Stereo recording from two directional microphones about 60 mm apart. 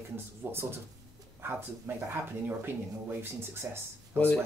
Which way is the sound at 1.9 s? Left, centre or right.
Right.